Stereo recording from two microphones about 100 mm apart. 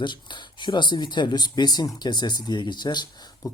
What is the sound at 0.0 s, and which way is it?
Speech, 50° left (ahead or behind).